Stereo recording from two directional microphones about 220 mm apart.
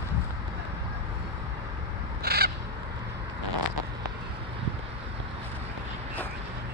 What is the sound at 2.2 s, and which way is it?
Crow, 45° right (ahead or behind).